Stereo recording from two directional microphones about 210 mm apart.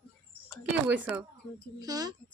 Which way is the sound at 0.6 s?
5° right (ahead or behind).